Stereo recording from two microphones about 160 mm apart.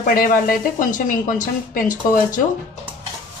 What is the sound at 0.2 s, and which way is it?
Speech, 60° left (ahead or behind).